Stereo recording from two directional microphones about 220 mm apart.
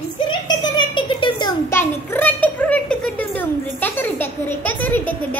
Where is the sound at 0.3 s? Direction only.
20° left (ahead or behind).